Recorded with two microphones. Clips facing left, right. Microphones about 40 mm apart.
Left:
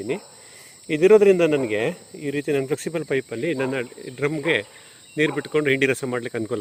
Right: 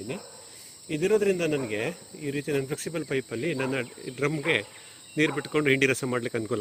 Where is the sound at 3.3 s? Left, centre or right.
Centre.